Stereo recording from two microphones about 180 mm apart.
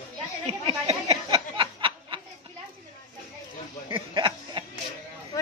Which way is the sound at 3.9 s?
25° right (ahead or behind).